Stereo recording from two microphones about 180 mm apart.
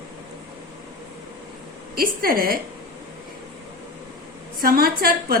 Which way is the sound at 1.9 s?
55° right (ahead or behind).